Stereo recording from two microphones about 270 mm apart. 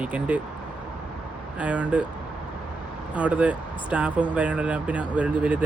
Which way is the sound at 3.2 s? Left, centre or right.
Centre.